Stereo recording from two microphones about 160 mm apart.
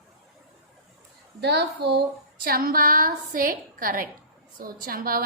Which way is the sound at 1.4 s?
90° right.